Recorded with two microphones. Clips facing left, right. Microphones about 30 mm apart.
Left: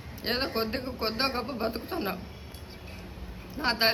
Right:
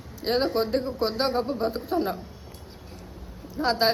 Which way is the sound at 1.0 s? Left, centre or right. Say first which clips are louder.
Right 2 dB; left.